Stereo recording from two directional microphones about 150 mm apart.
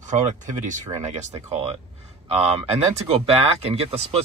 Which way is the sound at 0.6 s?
55° right (ahead or behind).